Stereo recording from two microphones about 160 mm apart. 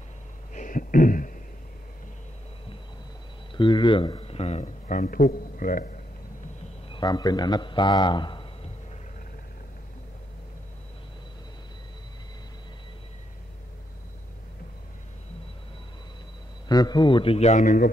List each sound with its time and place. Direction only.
0.5 s a sound: 55° left (ahead or behind)
3.5 s speech: 30° left (ahead or behind); by 5.9 s 60° left (ahead or behind)
6.9 s a man's voice: 25° left (ahead or behind)
16.6 s a man's voice: 25° left (ahead or behind); by 17.8 s 50° left (ahead or behind)